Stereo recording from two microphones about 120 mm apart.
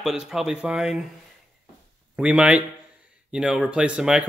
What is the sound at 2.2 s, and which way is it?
Speech, 10° right (ahead or behind).